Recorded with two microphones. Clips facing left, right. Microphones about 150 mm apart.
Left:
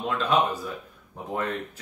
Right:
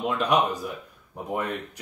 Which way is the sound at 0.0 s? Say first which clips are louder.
Right 1 dB; 15° right (ahead or behind).